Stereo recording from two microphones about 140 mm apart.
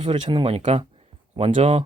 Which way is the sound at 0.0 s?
35° right (ahead or behind).